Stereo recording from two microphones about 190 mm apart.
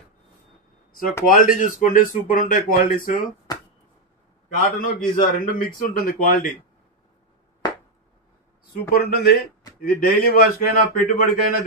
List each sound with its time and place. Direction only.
1.2 s a man's voice: 45° left (ahead or behind)
4.6 s a man's voice: 45° left (ahead or behind)
8.9 s a man's voice: 55° left (ahead or behind)